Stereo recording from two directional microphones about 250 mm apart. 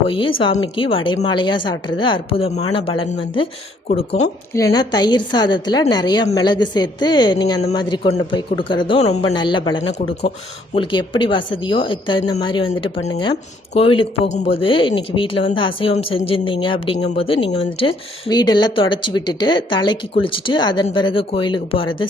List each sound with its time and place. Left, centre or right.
0.1 s a woman's voice: left
4.5 s a woman's voice: centre
10.8 s a woman's voice: centre